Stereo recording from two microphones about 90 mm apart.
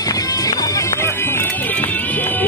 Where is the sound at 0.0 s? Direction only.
40° left (ahead or behind).